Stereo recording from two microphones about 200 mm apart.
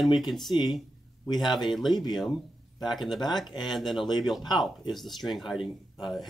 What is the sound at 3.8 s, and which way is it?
Speech, centre (ahead or behind).